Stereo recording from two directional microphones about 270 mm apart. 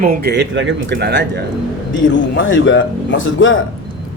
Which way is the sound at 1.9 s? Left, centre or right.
Left.